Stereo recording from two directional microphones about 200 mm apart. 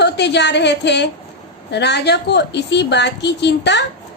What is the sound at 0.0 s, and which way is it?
A woman's voice, 60° left (ahead or behind).